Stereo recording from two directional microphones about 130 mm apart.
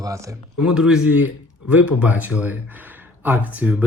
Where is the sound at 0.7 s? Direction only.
5° right (ahead or behind).